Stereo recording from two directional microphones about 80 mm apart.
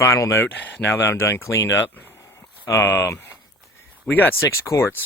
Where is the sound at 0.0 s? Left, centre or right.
Left.